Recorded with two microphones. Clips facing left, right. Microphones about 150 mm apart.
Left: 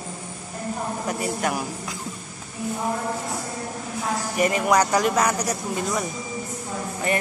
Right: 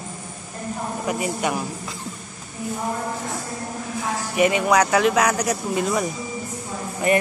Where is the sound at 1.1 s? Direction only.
10° right (ahead or behind).